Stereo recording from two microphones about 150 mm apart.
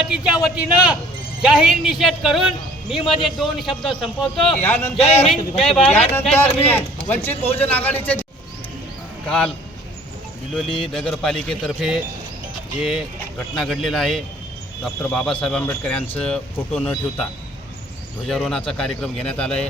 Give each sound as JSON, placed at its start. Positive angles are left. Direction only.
{"t": 0.0, "sound": "a man's voice", "side_deg": -5}
{"t": 4.9, "sound": "speech", "side_deg": 40}
{"t": 5.3, "sound": "a man's voice", "side_deg": 0}
{"t": 5.8, "sound": "speech", "side_deg": 45}
{"t": 6.2, "sound": "speech", "side_deg": 15}
{"t": 9.2, "sound": "speech", "side_deg": 5}
{"t": 10.5, "sound": "a man's voice", "side_deg": 0}
{"t": 18.3, "sound": "a man's voice", "side_deg": 5}